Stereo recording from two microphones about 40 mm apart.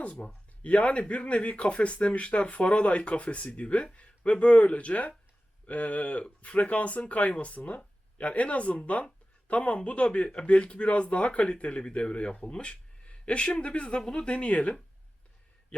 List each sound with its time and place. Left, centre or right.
0.0 s speech: left